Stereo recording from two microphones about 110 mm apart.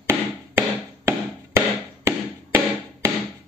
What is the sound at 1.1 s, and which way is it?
Music, 25° right (ahead or behind).